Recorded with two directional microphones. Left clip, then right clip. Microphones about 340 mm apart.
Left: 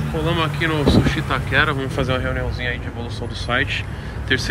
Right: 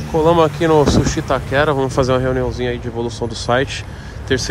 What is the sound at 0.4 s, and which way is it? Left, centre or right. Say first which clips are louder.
Speech: right 8 dB; centre.